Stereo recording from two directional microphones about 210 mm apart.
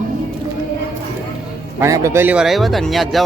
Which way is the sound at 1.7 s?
15° right (ahead or behind).